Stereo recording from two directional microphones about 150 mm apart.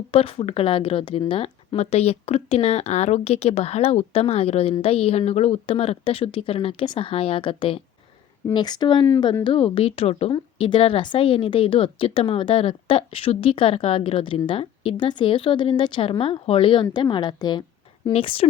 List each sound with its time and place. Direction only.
0.1 s a woman's voice: 40° left (ahead or behind)